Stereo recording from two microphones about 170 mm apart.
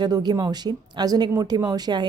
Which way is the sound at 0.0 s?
25° right (ahead or behind).